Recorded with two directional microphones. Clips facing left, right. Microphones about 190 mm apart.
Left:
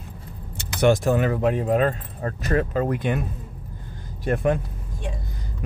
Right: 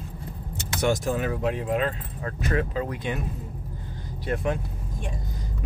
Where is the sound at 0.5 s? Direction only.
60° left (ahead or behind).